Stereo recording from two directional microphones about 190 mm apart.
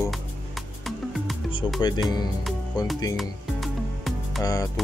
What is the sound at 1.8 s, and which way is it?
Speech, 20° left (ahead or behind).